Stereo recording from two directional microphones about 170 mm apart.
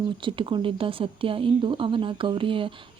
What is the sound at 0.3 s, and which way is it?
Speech, 30° right (ahead or behind).